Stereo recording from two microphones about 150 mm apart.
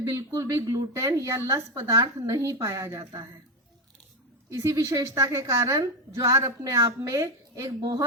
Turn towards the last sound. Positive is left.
turn(degrees=-20)  # may be behind; listen again after turning